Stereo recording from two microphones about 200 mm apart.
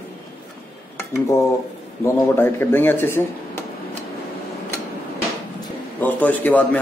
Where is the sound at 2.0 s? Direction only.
10° left (ahead or behind).